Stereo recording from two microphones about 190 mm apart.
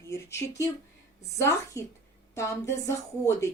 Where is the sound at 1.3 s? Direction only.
15° left (ahead or behind).